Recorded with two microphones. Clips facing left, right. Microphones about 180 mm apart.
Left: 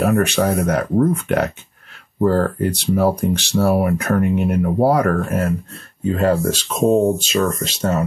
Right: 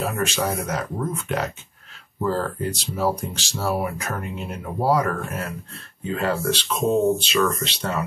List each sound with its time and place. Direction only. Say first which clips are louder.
0.0 s speech: left 8 dB; 60° left (ahead or behind); by 8.0 s 45° left (ahead or behind)